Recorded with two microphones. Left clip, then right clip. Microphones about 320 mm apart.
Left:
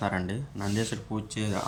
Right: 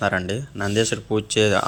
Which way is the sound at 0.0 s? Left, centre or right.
Centre.